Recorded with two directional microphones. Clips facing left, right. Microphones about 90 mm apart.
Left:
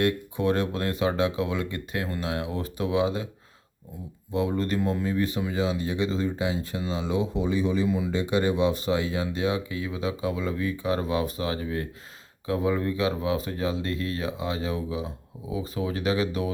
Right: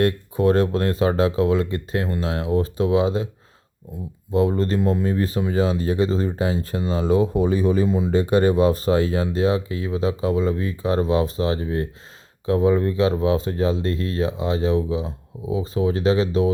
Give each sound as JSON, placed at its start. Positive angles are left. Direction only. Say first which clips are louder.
{"t": 0.0, "sound": "speech", "louder": "right 5 dB", "side_deg": -35}
{"t": 4.3, "sound": "speech", "louder": "right 6 dB", "side_deg": -35}
{"t": 7.9, "sound": "speech", "louder": "right 4 dB", "side_deg": -30}
{"t": 8.1, "sound": "speech", "louder": "right 7 dB", "side_deg": -45}